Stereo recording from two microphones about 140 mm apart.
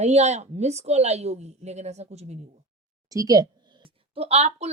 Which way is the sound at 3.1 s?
25° right (ahead or behind).